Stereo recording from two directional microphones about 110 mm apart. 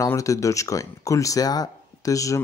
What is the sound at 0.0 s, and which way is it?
Speech, 30° left (ahead or behind).